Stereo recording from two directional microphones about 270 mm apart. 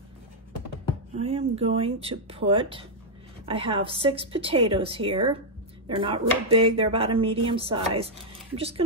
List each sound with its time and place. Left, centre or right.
1.1 s a woman's voice: right